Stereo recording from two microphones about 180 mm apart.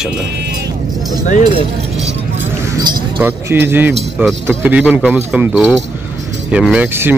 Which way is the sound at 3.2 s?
10° right (ahead or behind).